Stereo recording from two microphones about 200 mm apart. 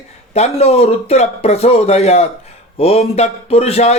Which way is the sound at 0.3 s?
30° left (ahead or behind).